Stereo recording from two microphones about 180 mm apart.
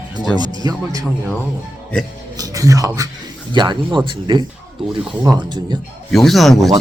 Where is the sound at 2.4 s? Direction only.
20° right (ahead or behind).